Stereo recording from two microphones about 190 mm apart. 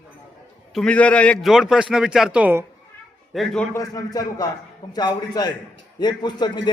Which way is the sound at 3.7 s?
15° left (ahead or behind).